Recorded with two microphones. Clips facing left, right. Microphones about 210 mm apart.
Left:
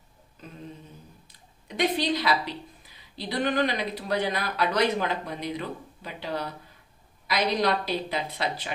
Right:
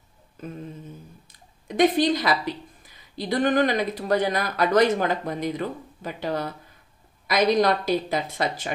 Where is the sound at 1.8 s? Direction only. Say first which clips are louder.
Right 6 dB; 50° right (ahead or behind).